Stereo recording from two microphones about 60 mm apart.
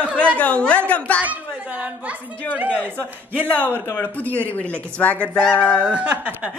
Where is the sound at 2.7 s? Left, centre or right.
Left.